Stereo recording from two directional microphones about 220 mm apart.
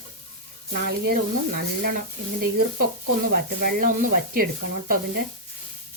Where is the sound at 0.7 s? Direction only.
45° right (ahead or behind).